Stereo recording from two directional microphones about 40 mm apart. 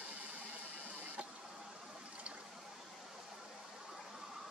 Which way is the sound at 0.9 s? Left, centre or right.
Right.